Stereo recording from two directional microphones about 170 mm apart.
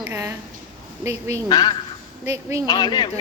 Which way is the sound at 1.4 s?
25° left (ahead or behind).